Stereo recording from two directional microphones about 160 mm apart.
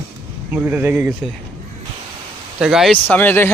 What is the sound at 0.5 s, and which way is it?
Speech, 10° right (ahead or behind).